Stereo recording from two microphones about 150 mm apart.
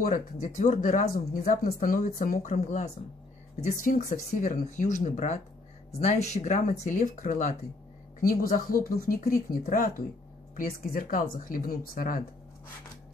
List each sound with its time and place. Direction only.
0.0 s speech: 60° left (ahead or behind)
8.2 s speech: 70° left (ahead or behind)